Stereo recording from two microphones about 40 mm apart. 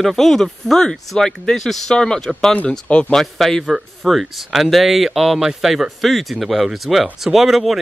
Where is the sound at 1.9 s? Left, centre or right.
Centre.